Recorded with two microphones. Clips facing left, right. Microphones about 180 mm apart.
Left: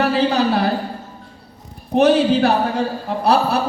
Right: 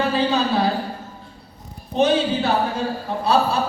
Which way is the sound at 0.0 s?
70° left (ahead or behind).